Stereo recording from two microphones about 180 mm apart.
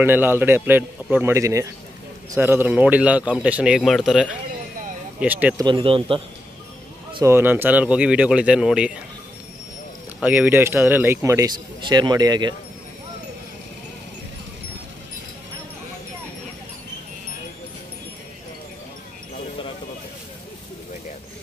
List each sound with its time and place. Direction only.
0.0 s speech: 10° right (ahead or behind)
5.6 s speech: 25° right (ahead or behind)
7.2 s speech: 10° right (ahead or behind)
10.2 s speech: 10° right (ahead or behind)